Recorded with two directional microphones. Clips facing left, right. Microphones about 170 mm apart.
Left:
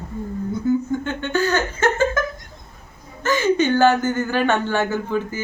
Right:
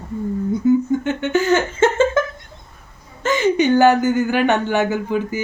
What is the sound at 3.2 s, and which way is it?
Speech, 20° right (ahead or behind).